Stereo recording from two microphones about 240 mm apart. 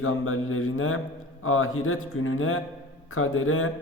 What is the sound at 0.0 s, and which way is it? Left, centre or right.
A man's voice, left.